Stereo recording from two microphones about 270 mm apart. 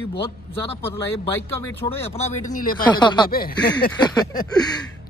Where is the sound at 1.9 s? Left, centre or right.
Left.